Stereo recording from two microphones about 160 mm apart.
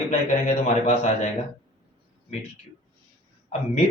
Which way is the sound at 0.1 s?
45° left (ahead or behind).